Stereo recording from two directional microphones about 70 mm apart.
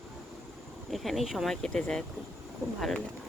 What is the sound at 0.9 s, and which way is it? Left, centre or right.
Speech, centre.